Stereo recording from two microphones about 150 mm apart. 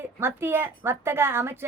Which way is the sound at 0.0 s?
15° right (ahead or behind).